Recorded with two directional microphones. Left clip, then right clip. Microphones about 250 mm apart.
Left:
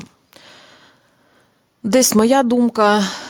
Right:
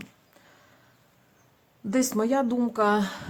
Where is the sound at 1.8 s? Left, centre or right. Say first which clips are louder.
Left 12 dB; left.